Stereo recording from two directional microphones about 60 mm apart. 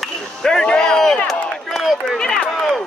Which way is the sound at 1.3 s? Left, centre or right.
Centre.